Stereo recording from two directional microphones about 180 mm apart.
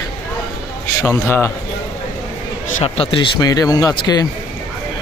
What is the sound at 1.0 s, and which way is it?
Speech, 15° left (ahead or behind).